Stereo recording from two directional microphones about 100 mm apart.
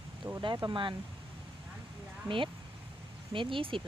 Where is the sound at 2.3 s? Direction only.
55° right (ahead or behind).